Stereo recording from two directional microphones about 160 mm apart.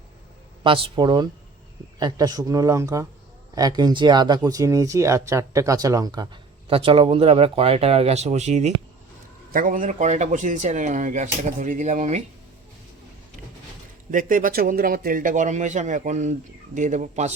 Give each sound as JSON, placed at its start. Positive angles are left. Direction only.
{"t": 0.6, "sound": "speech", "side_deg": -30}
{"t": 9.5, "sound": "a man's voice", "side_deg": -60}
{"t": 14.1, "sound": "a man's voice", "side_deg": -55}